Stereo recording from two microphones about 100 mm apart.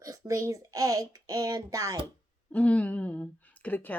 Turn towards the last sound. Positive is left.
turn(degrees=15)  # may be behind; listen again after turning